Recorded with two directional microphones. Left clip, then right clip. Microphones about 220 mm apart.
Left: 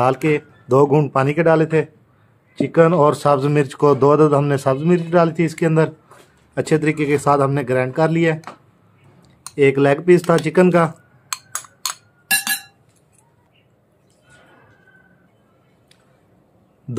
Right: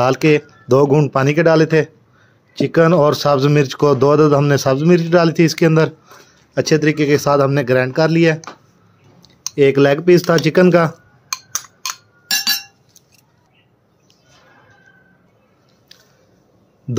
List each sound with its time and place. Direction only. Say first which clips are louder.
0.0 s speech: right 3 dB; 20° right (ahead or behind)
11.2 s music: right 4 dB; 5° left (ahead or behind)